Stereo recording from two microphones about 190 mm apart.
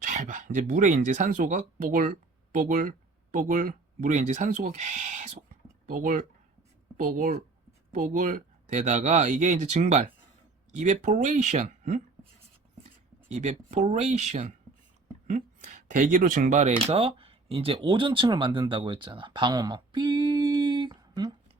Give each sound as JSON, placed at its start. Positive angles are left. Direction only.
{"t": 0.0, "sound": "speech", "side_deg": -45}
{"t": 13.2, "sound": "speech", "side_deg": -40}